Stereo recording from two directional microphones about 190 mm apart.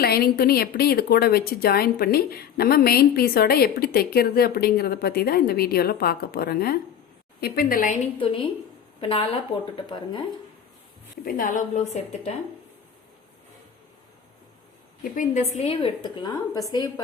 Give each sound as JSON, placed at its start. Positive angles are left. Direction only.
{"t": 0.0, "sound": "speech", "side_deg": 55}
{"t": 8.2, "sound": "speech", "side_deg": 30}
{"t": 11.3, "sound": "a woman's voice", "side_deg": 45}
{"t": 15.1, "sound": "a woman's voice", "side_deg": 40}